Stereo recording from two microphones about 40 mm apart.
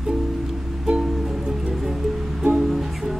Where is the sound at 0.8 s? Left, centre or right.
Centre.